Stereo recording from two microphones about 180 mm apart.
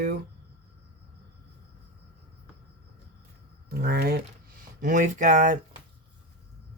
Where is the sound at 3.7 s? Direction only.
60° right (ahead or behind).